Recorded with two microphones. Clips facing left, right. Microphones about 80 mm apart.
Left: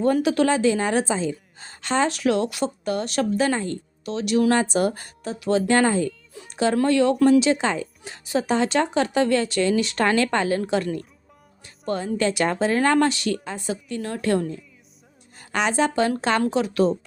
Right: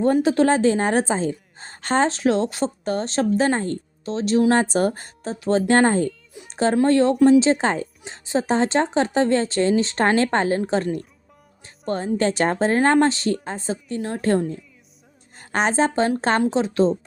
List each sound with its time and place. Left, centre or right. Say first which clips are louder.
0.0 s a woman's voice: right 2 dB; right
2.0 s a woman's voice: right 2 dB; right
6.3 s a sound: even; centre
6.8 s a woman's voice: right 3 dB; right
8.0 s a woman's voice: right 1 dB; right